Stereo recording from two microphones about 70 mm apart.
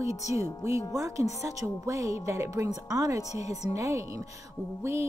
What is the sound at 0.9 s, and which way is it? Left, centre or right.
Speech, right.